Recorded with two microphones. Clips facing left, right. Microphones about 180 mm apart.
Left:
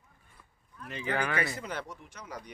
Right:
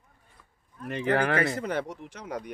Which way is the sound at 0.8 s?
60° right (ahead or behind).